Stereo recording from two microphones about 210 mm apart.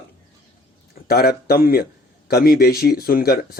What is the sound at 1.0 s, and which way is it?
Speech, 45° left (ahead or behind).